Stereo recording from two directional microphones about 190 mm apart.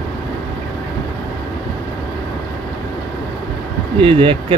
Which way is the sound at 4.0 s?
30° right (ahead or behind).